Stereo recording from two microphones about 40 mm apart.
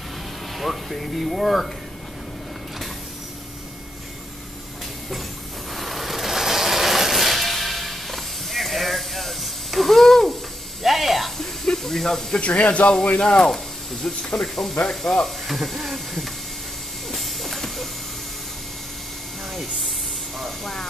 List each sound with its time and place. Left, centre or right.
0.6 s speech: centre
5.8 s mechanisms: centre
10.8 s a sound: centre
11.3 s spray: centre
12.4 s speech: left
13.2 s speech: centre
17.1 s a sound: centre
20.3 s vehicle: centre